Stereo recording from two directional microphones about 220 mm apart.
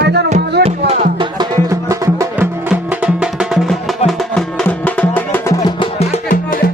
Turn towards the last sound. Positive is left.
turn(degrees=40)  # may be behind; listen again after turning